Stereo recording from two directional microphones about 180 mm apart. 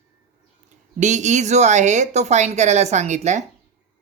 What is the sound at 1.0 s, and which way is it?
Speech, 40° right (ahead or behind).